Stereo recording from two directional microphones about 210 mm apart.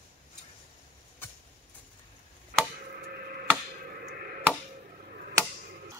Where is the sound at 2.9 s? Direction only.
45° right (ahead or behind).